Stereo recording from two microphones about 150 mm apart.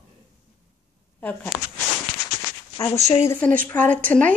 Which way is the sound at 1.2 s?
10° left (ahead or behind).